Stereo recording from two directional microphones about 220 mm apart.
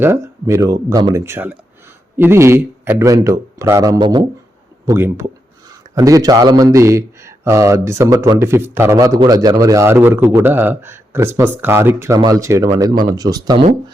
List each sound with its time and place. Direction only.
0.0 s a man's voice: 10° right (ahead or behind)